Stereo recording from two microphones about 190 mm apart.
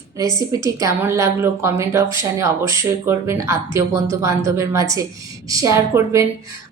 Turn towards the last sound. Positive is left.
turn(degrees=-15)  # may be behind; listen again after turning